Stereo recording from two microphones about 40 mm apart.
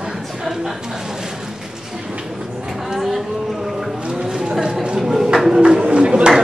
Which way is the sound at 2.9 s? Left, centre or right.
Centre.